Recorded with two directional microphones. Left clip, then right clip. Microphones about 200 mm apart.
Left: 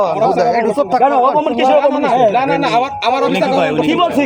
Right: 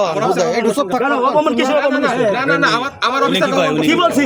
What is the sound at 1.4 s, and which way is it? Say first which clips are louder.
Speech: left 3 dB; 90° right.